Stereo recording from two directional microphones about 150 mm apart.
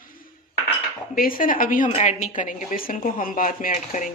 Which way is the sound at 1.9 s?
55° left (ahead or behind).